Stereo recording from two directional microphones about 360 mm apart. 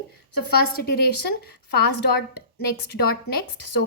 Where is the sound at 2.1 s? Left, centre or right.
Left.